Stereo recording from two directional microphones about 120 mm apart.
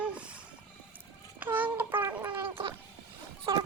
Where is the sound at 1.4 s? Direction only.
15° right (ahead or behind).